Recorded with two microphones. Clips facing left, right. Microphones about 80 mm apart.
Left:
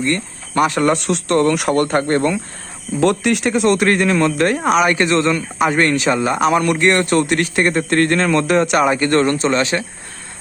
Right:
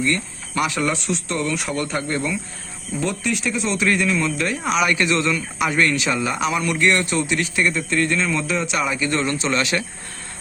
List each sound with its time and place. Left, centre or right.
0.0 s speech: left
3.0 s speech: left
9.6 s speech: left